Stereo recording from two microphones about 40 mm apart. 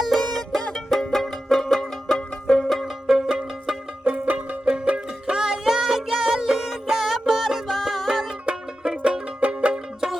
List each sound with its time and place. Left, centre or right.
0.2 s music: centre
2.8 s music: centre
4.0 s music: right
4.7 s music: right; by 8.3 s centre
8.4 s music: right